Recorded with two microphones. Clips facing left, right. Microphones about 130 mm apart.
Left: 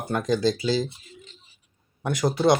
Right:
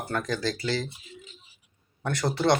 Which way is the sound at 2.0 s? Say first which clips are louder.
Left 3 dB; 10° left (ahead or behind).